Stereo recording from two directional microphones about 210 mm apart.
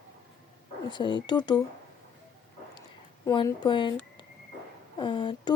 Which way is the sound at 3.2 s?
20° left (ahead or behind).